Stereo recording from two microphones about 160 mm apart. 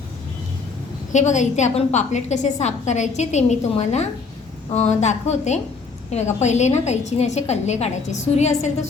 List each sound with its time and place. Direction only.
1.1 s a woman's voice: 50° left (ahead or behind)